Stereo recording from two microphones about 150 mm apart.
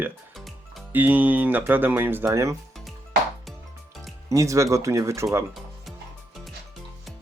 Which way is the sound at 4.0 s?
20° right (ahead or behind).